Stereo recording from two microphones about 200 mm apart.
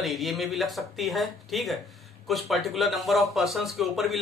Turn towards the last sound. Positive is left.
turn(degrees=0)  # may be behind; listen again after turning